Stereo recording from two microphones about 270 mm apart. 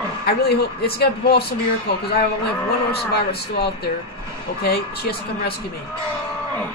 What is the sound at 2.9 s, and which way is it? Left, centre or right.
Speech, left.